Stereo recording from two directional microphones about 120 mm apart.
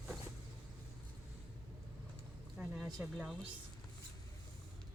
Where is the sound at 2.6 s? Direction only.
5° right (ahead or behind).